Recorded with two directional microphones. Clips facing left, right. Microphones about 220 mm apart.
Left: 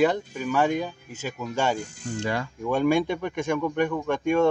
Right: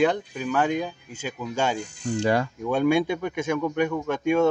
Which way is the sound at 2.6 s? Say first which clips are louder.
Left 3 dB; centre (ahead or behind).